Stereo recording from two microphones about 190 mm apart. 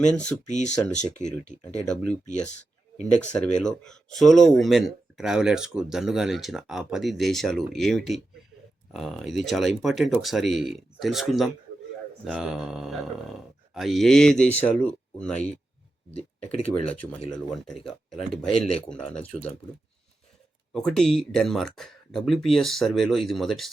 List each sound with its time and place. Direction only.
0.1 s speech: 5° left (ahead or behind)
0.4 s speech: 40° left (ahead or behind)
1.8 s speech: 5° left (ahead or behind)
3.2 s speech: 5° left (ahead or behind)
16.1 s speech: 30° left (ahead or behind)
17.3 s speech: centre (ahead or behind)
20.7 s speech: centre (ahead or behind)